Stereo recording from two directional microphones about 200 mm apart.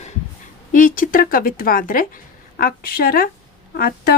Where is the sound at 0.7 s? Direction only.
40° left (ahead or behind).